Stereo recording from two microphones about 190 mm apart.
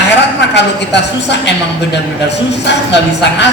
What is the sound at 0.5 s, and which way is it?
A man's voice, 65° left (ahead or behind).